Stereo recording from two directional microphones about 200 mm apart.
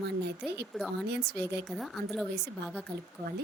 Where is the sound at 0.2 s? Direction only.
55° right (ahead or behind).